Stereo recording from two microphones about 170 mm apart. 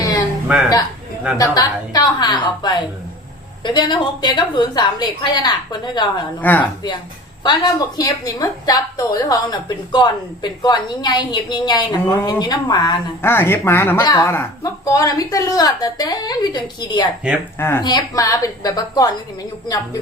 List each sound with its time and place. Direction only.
1.5 s a woman's voice: 20° left (ahead or behind)
6.4 s speech: 10° left (ahead or behind)
7.4 s a woman's voice: 25° left (ahead or behind)
13.2 s a woman's voice: 15° left (ahead or behind)
17.6 s a woman's voice: 15° left (ahead or behind)